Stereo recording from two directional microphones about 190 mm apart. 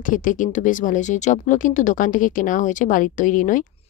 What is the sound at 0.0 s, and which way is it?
A woman's voice, 45° left (ahead or behind).